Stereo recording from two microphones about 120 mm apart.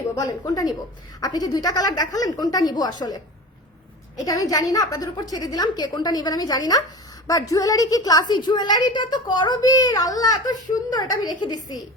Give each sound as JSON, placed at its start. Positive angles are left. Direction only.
{"t": 0.2, "sound": "a woman's voice", "side_deg": 30}
{"t": 4.3, "sound": "a woman's voice", "side_deg": 30}